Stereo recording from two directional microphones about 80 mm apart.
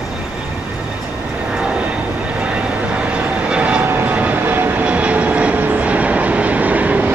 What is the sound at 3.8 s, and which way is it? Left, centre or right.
Vehicle, right.